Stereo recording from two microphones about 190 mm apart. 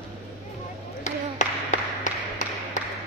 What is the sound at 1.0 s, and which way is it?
Tap, 40° left (ahead or behind).